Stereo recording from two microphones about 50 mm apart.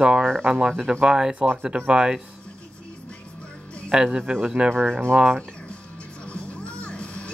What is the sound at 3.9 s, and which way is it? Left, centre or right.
Speech, centre.